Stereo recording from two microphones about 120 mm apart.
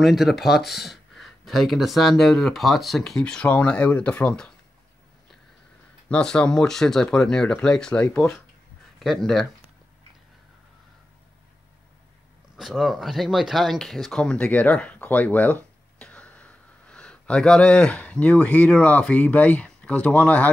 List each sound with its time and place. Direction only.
0.0 s speech: centre (ahead or behind)
6.0 s speech: 5° left (ahead or behind)
12.5 s speech: centre (ahead or behind)